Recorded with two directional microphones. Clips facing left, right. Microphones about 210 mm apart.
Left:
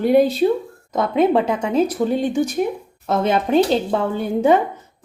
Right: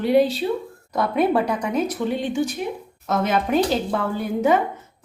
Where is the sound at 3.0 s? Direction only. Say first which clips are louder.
Left 3 dB; 30° left (ahead or behind).